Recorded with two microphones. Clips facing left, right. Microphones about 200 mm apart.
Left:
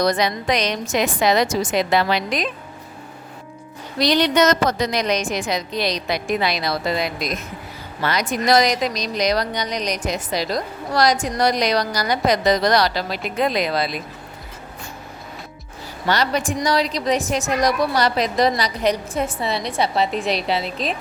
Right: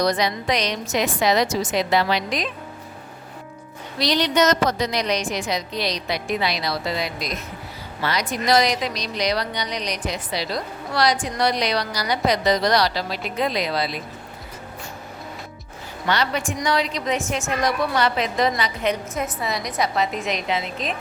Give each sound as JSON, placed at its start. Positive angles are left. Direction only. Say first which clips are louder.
{"t": 0.0, "sound": "speech", "louder": "left 2 dB", "side_deg": 55}
{"t": 4.0, "sound": "speech", "louder": "left 3 dB", "side_deg": 55}
{"t": 16.0, "sound": "a woman's voice", "louder": "left 3 dB", "side_deg": 40}